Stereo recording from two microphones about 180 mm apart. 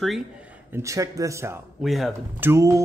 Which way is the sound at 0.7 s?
15° right (ahead or behind).